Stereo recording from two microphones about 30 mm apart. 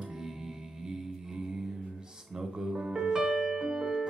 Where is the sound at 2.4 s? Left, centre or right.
Right.